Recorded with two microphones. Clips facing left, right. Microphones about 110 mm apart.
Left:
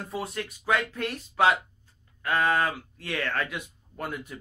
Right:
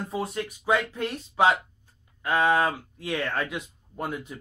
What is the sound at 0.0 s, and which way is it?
Speech, 25° right (ahead or behind).